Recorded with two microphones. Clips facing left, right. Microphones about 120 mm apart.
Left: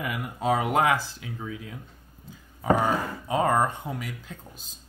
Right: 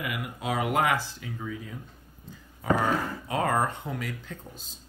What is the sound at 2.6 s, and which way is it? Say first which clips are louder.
Speech: left 2 dB; 20° left (ahead or behind).